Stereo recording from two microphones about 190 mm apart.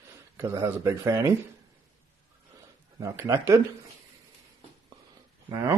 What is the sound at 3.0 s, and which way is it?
Speech, 15° right (ahead or behind).